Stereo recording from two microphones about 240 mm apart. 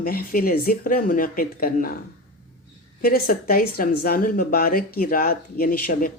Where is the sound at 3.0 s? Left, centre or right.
Left.